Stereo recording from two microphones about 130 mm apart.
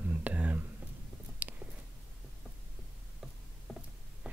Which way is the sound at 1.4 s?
10° right (ahead or behind).